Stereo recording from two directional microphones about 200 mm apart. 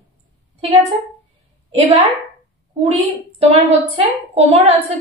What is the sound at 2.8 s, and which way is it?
A woman's voice, 30° right (ahead or behind).